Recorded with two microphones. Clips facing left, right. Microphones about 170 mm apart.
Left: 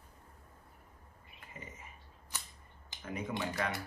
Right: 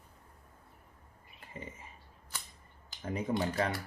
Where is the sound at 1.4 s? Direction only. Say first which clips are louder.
Right 5 dB; 30° right (ahead or behind).